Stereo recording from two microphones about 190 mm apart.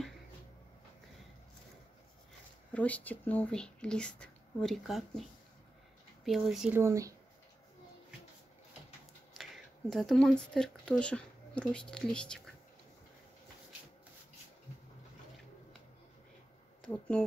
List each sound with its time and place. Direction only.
2.7 s speech: 5° left (ahead or behind)
6.2 s speech: centre (ahead or behind)
6.8 s speech: 15° right (ahead or behind)
9.3 s speech: centre (ahead or behind)
16.8 s speech: 5° left (ahead or behind)